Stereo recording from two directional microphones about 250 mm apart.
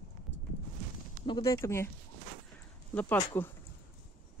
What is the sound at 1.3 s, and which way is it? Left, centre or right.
Speech, centre.